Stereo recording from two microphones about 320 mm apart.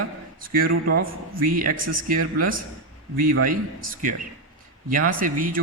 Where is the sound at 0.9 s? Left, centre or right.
Right.